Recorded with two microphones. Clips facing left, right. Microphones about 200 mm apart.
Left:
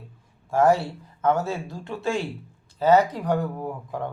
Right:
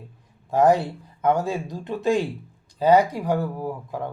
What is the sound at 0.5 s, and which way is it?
A man's voice, 15° right (ahead or behind).